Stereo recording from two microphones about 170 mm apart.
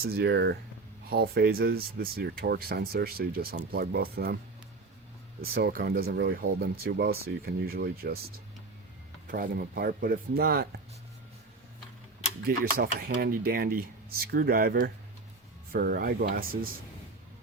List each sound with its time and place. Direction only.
0.0 s speech: 65° right (ahead or behind)
1.1 s speech: 65° right (ahead or behind)
5.4 s speech: 65° right (ahead or behind)
9.2 s speech: 55° right (ahead or behind)
12.5 s speech: 60° right (ahead or behind)